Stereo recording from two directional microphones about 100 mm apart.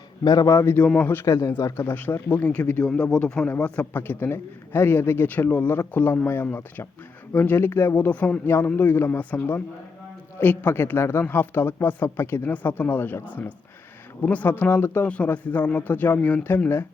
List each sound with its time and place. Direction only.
0.3 s a man's voice: 35° left (ahead or behind)
0.8 s a man's voice: 15° left (ahead or behind)
14.3 s a man's voice: 15° left (ahead or behind)